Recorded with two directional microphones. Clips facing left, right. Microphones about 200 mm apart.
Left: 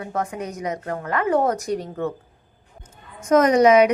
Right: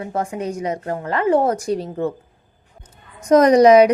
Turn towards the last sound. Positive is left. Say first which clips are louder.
# right 4 dB
turn(degrees=-35)  # may be behind; listen again after turning